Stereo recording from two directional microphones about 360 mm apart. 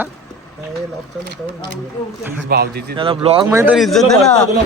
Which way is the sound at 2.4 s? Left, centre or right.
Right.